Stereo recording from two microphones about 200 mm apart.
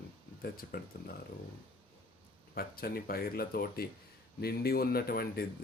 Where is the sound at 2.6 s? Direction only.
50° left (ahead or behind).